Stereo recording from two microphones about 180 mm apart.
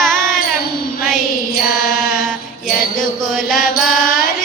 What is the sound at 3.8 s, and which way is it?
Carnatic music, centre (ahead or behind).